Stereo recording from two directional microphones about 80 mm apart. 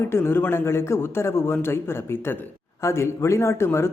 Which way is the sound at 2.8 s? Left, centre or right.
Left.